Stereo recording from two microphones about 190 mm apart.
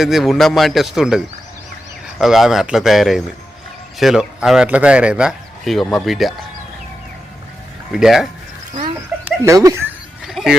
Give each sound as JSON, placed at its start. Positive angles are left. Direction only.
{"t": 0.0, "sound": "speech", "side_deg": 0}
{"t": 7.9, "sound": "speech", "side_deg": 0}
{"t": 9.4, "sound": "speech", "side_deg": -15}
{"t": 10.2, "sound": "a sound", "side_deg": 0}